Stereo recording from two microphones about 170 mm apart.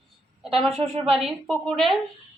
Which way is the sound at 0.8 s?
40° right (ahead or behind).